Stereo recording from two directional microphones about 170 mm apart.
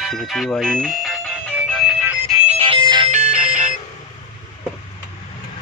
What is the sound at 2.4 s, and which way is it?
Music, 35° right (ahead or behind).